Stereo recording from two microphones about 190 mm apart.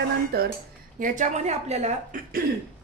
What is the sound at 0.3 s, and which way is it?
Speech, 55° right (ahead or behind).